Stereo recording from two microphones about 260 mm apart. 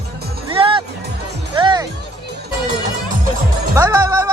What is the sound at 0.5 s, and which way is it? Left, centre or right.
Music, centre.